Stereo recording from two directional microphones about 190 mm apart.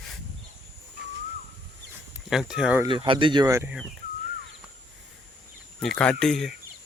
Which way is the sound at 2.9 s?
25° right (ahead or behind).